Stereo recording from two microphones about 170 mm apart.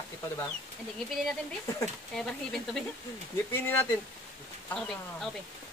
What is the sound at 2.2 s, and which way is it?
Speech, 5° left (ahead or behind).